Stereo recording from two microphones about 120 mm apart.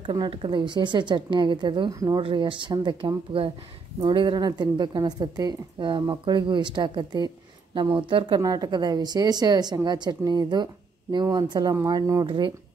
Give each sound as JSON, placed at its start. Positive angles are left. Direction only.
{"t": 0.0, "sound": "a woman's voice", "side_deg": -45}
{"t": 8.4, "sound": "a woman's voice", "side_deg": -30}
{"t": 11.7, "sound": "a woman's voice", "side_deg": -25}